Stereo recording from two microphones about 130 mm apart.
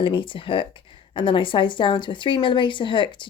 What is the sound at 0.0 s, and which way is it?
Speech, 40° left (ahead or behind).